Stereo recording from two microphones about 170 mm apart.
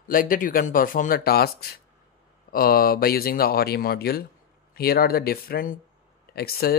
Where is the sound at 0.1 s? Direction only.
55° left (ahead or behind).